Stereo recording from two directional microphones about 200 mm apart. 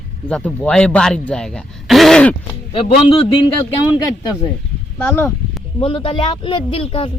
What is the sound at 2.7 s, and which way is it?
Speech, 25° left (ahead or behind).